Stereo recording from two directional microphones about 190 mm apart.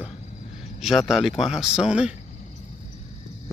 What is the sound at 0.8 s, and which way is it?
Speech, centre (ahead or behind).